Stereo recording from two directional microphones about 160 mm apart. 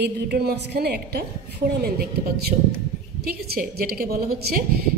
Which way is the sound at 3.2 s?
70° right (ahead or behind).